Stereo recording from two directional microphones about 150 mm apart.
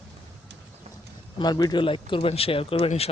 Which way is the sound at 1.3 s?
30° left (ahead or behind).